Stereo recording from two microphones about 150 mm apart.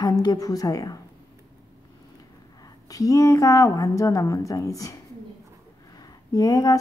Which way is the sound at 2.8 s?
25° left (ahead or behind).